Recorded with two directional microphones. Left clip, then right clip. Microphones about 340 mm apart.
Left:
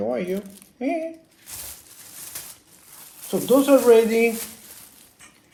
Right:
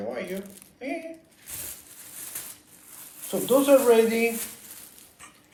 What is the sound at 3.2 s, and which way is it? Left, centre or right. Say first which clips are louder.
Speech: left 3 dB; left.